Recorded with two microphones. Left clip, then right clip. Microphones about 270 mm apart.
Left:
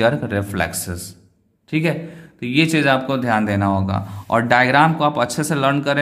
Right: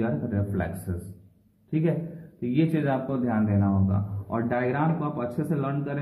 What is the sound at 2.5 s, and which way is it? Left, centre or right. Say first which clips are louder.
Speech: left 10 dB; left.